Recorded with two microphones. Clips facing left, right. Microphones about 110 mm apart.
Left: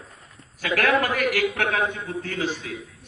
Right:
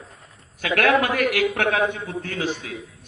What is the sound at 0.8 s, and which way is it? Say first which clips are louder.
A man's voice: right 3 dB; 65° right (ahead or behind).